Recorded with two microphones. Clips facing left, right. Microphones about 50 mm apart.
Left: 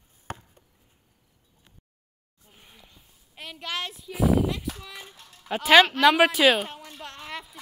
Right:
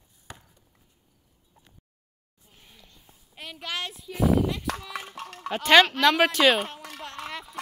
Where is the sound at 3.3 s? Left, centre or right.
Centre.